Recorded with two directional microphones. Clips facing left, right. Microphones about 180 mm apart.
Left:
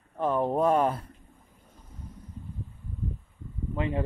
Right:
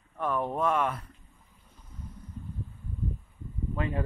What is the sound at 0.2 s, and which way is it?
Speech, 30° left (ahead or behind).